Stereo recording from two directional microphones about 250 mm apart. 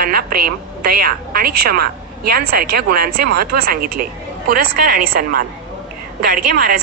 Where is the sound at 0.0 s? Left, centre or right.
Right.